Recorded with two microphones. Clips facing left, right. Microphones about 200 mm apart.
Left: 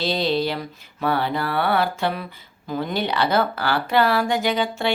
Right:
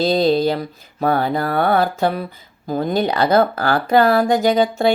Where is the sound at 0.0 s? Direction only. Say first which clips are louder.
Right 7 dB; 45° right (ahead or behind).